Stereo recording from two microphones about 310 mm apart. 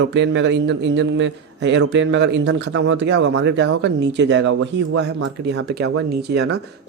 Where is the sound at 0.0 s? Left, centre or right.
Right.